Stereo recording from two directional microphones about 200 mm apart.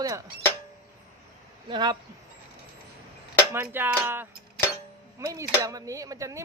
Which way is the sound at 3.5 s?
10° right (ahead or behind).